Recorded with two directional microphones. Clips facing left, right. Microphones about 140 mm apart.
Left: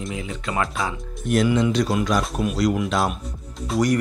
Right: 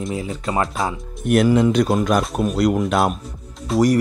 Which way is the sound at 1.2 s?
55° right (ahead or behind).